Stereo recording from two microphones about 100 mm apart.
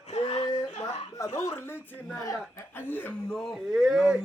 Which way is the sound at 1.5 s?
25° left (ahead or behind).